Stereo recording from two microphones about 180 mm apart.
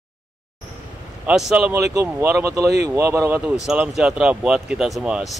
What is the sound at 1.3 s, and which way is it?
Speech, 5° right (ahead or behind).